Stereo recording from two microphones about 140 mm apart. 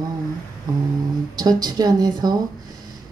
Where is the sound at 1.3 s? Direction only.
25° right (ahead or behind).